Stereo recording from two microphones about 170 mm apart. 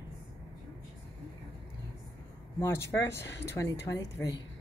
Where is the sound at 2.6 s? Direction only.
15° left (ahead or behind).